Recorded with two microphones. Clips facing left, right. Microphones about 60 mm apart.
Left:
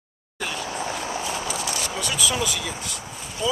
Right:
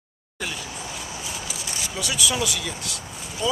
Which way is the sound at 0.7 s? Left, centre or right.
Left.